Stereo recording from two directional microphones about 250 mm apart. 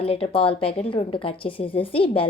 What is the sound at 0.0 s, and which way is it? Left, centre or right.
A woman's voice, left.